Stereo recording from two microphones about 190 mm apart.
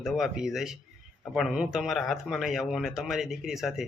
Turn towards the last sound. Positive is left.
turn(degrees=0)  # may be behind; listen again after turning